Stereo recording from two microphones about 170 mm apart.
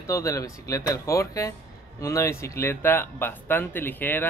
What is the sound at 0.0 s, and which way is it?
Speech, 20° left (ahead or behind).